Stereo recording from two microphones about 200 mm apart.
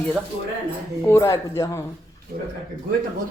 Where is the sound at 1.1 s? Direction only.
15° left (ahead or behind).